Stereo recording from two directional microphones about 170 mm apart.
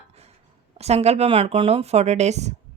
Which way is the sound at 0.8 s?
40° right (ahead or behind).